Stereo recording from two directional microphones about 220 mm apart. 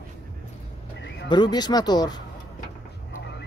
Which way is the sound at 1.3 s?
20° left (ahead or behind).